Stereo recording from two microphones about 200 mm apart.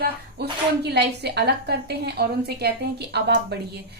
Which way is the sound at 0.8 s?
55° right (ahead or behind).